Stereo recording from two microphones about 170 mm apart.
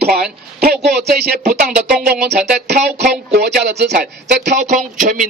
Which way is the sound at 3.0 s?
75° right (ahead or behind).